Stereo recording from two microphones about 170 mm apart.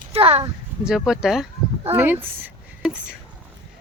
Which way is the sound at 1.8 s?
15° right (ahead or behind).